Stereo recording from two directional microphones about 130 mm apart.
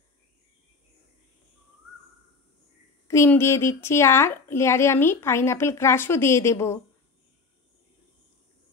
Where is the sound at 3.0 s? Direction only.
20° left (ahead or behind).